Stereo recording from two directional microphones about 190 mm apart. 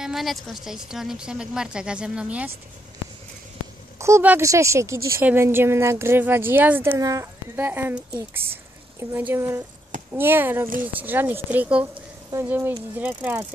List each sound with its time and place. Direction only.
0.0 s speech: centre (ahead or behind)
4.0 s a woman's voice: 10° right (ahead or behind)
11.9 s a sound: 20° right (ahead or behind)
12.4 s a woman's voice: 10° right (ahead or behind)